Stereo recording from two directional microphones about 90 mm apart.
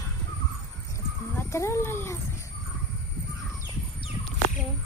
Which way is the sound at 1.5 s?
35° left (ahead or behind).